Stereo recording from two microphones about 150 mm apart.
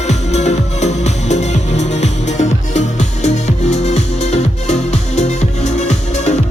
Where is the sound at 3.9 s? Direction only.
50° left (ahead or behind).